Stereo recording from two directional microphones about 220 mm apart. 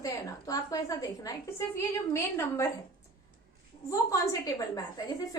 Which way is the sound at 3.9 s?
15° left (ahead or behind).